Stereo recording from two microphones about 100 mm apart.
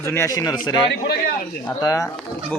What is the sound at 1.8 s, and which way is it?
Speech, 35° left (ahead or behind).